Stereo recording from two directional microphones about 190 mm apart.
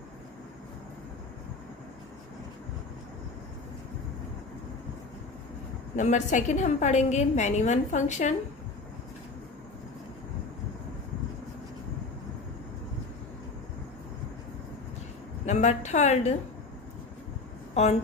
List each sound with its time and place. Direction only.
6.0 s a woman's voice: 40° left (ahead or behind)
15.4 s a woman's voice: 35° left (ahead or behind)
17.8 s a woman's voice: 35° left (ahead or behind)